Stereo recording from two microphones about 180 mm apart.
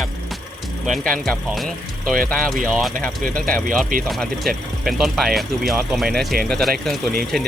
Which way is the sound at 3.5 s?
Centre (ahead or behind).